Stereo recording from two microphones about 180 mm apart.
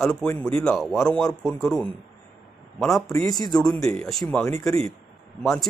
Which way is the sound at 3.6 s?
20° left (ahead or behind).